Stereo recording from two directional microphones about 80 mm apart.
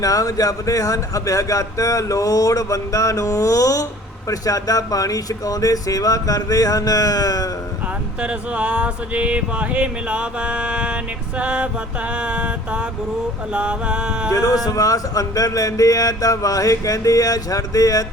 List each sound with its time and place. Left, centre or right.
0.0 s speech: left
8.2 s a sound: centre
14.3 s speech: left